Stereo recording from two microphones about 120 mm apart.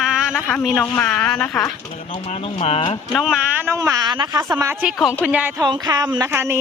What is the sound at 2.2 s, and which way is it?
Speech, 55° left (ahead or behind).